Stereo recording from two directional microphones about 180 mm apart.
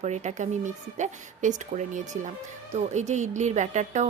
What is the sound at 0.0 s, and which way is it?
A woman's voice, 40° right (ahead or behind).